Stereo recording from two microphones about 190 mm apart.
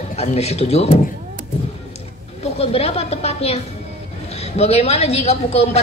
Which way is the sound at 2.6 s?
35° left (ahead or behind).